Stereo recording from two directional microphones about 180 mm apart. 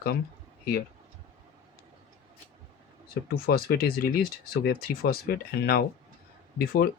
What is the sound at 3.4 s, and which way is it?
Speech, 55° left (ahead or behind).